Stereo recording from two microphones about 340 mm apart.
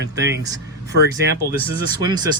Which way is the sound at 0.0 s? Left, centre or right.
Right.